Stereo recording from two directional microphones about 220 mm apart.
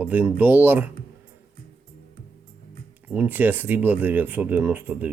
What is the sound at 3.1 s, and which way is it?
Speech, 10° right (ahead or behind).